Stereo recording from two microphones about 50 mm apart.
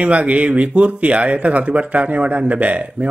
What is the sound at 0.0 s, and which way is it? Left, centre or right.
Speech, right.